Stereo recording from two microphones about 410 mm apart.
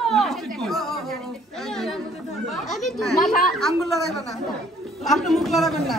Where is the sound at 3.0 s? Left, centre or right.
Centre.